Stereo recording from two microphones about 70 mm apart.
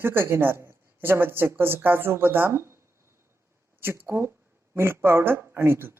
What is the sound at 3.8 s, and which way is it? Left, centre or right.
A woman's voice, right.